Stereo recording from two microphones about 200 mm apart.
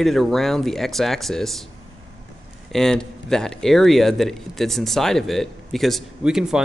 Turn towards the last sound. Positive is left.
turn(degrees=0)  # may be behind; listen again after turning